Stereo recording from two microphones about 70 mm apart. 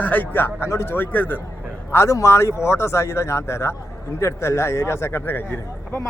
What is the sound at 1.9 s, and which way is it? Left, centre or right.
Speech, left.